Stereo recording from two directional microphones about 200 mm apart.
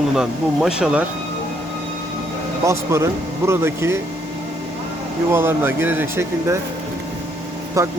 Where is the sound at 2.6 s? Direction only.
15° right (ahead or behind).